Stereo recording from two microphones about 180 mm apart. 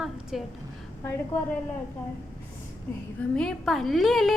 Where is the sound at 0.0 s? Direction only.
Centre (ahead or behind).